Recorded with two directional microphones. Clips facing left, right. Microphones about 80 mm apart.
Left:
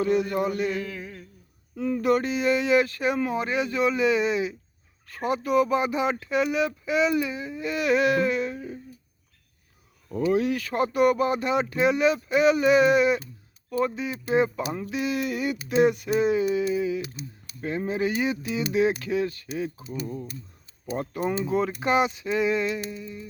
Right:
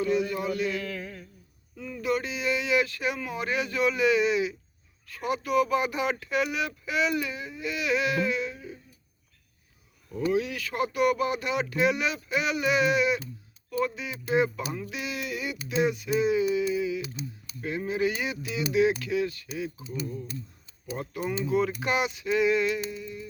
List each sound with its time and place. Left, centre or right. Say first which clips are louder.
0.0 s speech: left 3 dB; left
0.8 s a sound: left 1 dB; centre
1.7 s speech: left 6 dB; left
10.3 s speech: left 5 dB; left
20.9 s speech: left 4 dB; left